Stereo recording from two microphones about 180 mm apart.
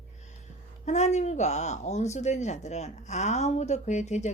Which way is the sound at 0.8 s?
40° left (ahead or behind).